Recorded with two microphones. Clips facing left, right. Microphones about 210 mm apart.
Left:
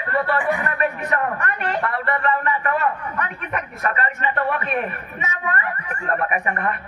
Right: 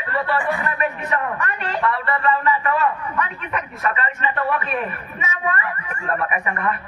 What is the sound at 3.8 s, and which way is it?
A man's voice, 45° left (ahead or behind).